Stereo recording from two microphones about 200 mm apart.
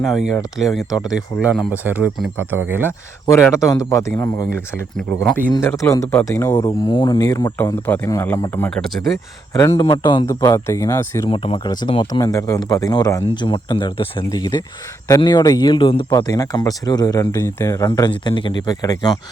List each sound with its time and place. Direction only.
0.0 s speech: centre (ahead or behind)
3.2 s speech: 15° left (ahead or behind)
4.9 s speech: 5° left (ahead or behind)
9.5 s speech: 15° left (ahead or behind)
11.3 s speech: 25° left (ahead or behind)